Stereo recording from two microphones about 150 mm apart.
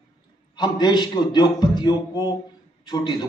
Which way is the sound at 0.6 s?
30° left (ahead or behind).